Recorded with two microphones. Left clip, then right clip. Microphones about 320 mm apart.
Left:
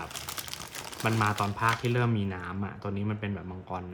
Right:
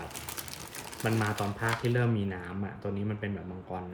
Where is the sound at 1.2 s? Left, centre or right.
Centre.